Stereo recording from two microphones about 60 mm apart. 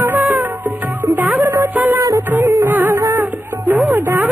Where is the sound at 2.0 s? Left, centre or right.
Right.